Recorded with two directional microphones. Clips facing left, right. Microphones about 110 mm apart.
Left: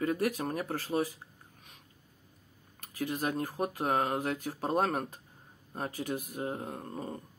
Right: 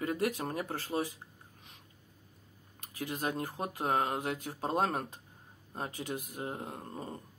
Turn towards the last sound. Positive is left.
turn(degrees=-30)  # may be behind; listen again after turning